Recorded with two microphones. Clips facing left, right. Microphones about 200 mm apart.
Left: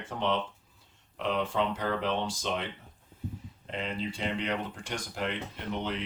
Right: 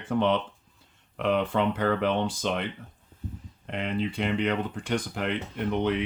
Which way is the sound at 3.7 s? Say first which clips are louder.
Right 5 dB; 60° right (ahead or behind).